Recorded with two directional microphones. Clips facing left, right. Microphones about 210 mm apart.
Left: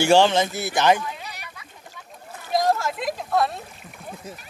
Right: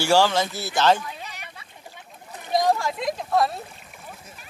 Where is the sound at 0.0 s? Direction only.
20° left (ahead or behind).